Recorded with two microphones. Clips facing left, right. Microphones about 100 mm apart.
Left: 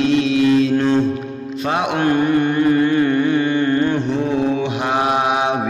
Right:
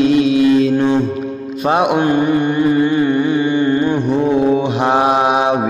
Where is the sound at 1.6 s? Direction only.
20° right (ahead or behind).